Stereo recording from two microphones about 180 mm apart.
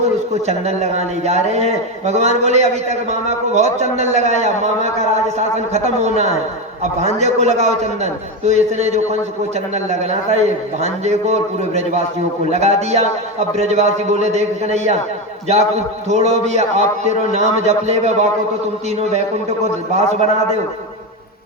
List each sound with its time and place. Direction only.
0.4 s a man's voice: 35° right (ahead or behind)